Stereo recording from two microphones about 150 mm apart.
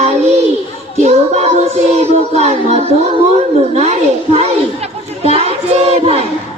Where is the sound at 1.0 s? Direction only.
45° right (ahead or behind).